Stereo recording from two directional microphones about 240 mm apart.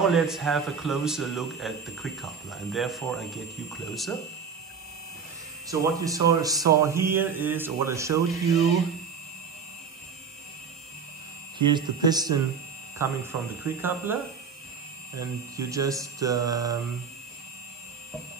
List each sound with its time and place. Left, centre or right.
0.1 s speech: centre
5.7 s speech: centre
11.5 s speech: centre
15.1 s speech: centre